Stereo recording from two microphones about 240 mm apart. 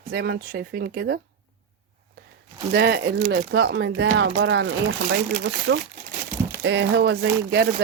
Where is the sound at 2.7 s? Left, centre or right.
Right.